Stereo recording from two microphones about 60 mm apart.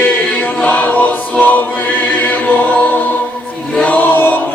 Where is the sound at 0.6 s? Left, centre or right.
Left.